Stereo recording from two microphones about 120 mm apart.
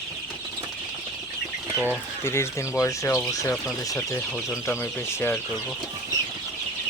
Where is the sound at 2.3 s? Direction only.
25° left (ahead or behind).